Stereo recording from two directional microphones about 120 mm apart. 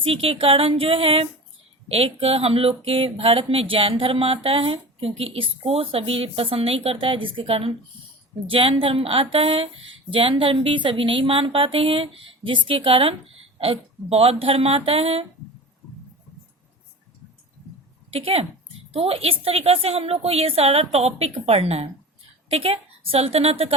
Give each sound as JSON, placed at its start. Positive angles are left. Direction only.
{"t": 0.0, "sound": "speech", "side_deg": -50}
{"t": 18.1, "sound": "a woman's voice", "side_deg": -55}